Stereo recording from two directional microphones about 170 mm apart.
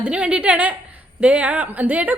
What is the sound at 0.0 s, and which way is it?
A woman's voice, 5° right (ahead or behind).